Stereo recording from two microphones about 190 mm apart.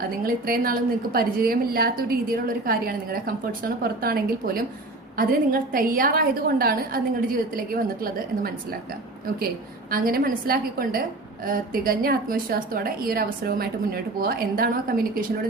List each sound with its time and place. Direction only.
0.0 s a woman's voice: 50° right (ahead or behind)
9.9 s a woman's voice: 50° right (ahead or behind)